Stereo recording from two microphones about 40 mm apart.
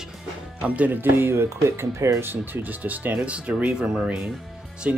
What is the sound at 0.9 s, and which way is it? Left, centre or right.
Speech, right.